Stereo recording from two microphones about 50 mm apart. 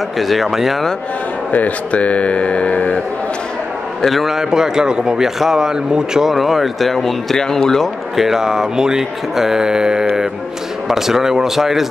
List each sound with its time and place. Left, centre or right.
0.2 s a man's voice: centre
1.5 s speech: left
4.0 s a man's voice: centre
8.2 s speech: centre